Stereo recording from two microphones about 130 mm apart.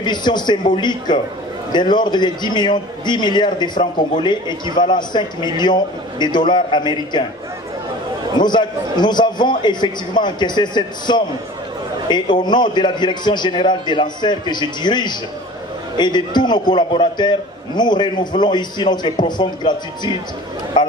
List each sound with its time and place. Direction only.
0.0 s a man's voice: 35° left (ahead or behind)
8.4 s a man's voice: 35° left (ahead or behind)